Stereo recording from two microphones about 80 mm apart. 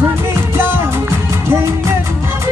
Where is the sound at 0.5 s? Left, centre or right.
Right.